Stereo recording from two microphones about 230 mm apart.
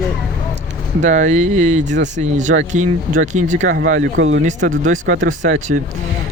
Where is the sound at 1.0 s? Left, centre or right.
Right.